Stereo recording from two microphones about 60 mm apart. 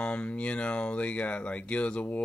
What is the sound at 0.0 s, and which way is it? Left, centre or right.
Speech, left.